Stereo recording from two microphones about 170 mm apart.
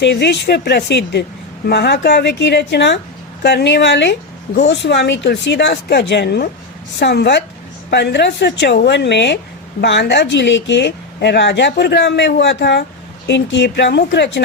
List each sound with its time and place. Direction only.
0.0 s speech: 90° left
1.6 s speech: 75° left (ahead or behind)
7.9 s speech: 90° left